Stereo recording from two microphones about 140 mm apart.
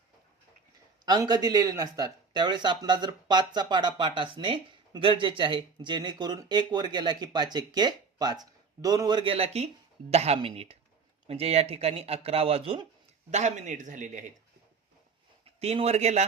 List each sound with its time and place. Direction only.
1.0 s speech: 30° right (ahead or behind)
13.3 s a man's voice: 55° right (ahead or behind)
15.6 s speech: 50° right (ahead or behind)